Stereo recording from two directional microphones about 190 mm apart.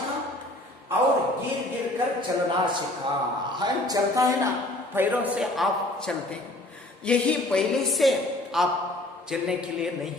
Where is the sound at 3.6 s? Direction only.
20° right (ahead or behind).